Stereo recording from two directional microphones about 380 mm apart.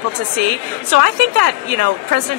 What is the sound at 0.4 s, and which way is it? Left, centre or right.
Speech, right.